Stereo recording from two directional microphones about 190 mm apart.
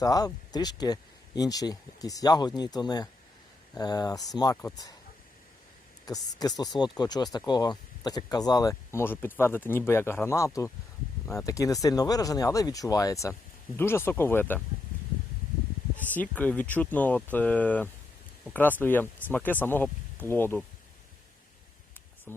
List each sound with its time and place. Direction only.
0.0 s speech: 20° left (ahead or behind)
6.1 s speech: 20° left (ahead or behind)
16.1 s speech: 10° left (ahead or behind)
22.3 s speech: 10° left (ahead or behind)